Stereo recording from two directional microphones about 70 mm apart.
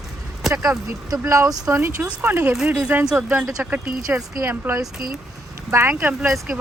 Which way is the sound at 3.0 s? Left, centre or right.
Centre.